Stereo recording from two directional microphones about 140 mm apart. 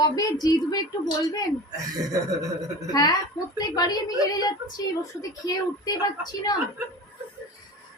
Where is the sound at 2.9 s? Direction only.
30° left (ahead or behind).